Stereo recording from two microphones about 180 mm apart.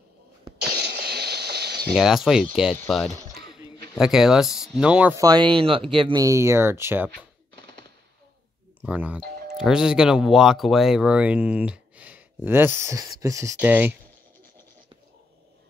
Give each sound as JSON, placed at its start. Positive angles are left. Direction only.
{"t": 0.6, "sound": "a sound", "side_deg": -65}
{"t": 2.0, "sound": "speech", "side_deg": 0}
{"t": 4.0, "sound": "speech", "side_deg": -5}
{"t": 5.1, "sound": "speech", "side_deg": -20}
{"t": 7.1, "sound": "a sound", "side_deg": -70}
{"t": 8.8, "sound": "speech", "side_deg": -5}